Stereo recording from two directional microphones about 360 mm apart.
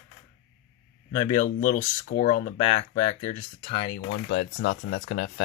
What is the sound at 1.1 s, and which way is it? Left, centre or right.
Speech, centre.